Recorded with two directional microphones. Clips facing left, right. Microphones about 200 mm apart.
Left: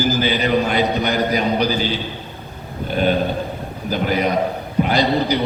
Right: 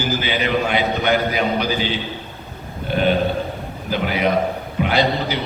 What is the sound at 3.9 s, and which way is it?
A man's voice, 40° left (ahead or behind).